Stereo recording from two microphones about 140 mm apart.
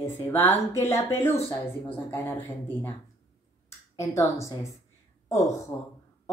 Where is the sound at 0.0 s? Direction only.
15° left (ahead or behind).